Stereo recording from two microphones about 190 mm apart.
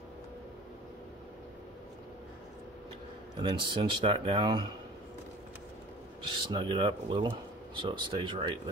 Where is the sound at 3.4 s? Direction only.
25° right (ahead or behind).